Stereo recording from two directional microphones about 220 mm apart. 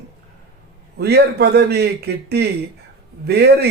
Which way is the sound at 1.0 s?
50° right (ahead or behind).